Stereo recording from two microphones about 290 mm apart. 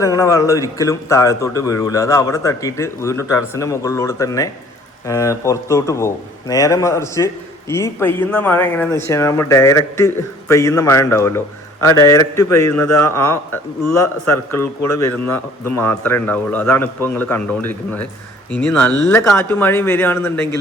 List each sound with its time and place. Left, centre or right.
0.0 s speech: centre